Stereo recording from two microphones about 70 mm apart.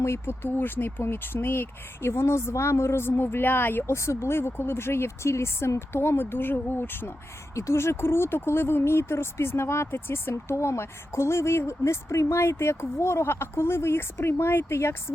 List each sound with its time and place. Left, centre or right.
0.0 s speech: left